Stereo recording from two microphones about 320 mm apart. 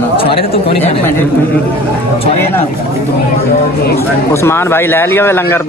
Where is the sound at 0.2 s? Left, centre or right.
Centre.